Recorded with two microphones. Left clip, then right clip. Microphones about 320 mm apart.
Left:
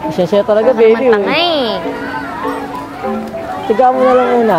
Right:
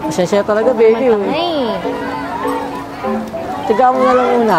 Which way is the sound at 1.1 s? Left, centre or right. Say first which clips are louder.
Left 3 dB; left.